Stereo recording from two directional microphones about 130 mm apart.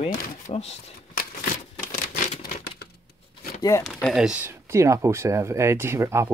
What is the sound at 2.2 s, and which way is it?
Crumpling, 65° left (ahead or behind).